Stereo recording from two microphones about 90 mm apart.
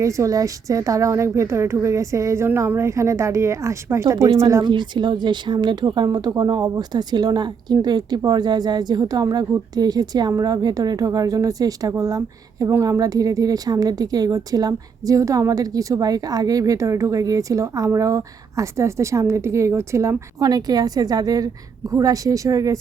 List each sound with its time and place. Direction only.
0.0 s speech: 35° right (ahead or behind)
4.6 s a woman's voice: 60° right (ahead or behind); by 20.5 s 35° right (ahead or behind)
20.5 s a woman's voice: 45° right (ahead or behind)